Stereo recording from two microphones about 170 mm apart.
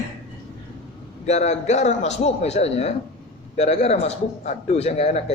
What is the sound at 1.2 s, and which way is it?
A man's voice, 40° left (ahead or behind).